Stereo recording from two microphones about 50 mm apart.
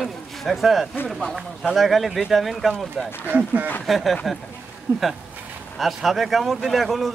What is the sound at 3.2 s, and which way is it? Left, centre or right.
Speech, right.